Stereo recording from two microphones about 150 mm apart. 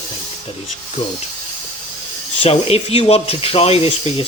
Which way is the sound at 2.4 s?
40° left (ahead or behind).